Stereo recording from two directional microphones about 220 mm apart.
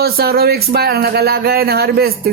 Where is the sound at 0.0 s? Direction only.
45° right (ahead or behind).